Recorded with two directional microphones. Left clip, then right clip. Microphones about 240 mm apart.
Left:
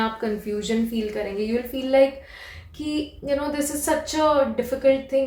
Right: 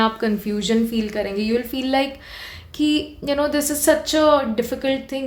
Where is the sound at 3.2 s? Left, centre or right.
Right.